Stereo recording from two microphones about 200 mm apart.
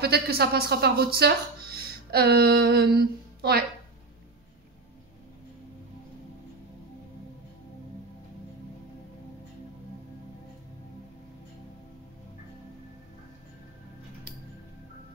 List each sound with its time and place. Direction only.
0.0 s speech: 55° right (ahead or behind)